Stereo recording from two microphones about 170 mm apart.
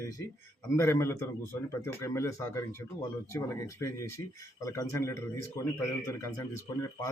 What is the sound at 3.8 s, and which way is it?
A man's voice, 15° left (ahead or behind).